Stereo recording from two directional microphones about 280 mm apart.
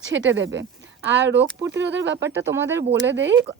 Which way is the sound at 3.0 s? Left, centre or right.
Right.